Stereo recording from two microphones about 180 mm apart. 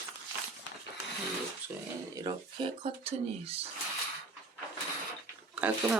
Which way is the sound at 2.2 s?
30° right (ahead or behind).